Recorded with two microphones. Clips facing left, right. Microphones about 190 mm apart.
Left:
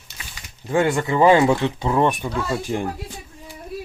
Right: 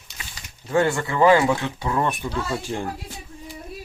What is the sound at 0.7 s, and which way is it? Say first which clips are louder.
Speech: left 2 dB; 15° left (ahead or behind).